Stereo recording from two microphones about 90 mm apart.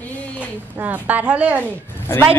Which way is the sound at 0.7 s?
20° right (ahead or behind).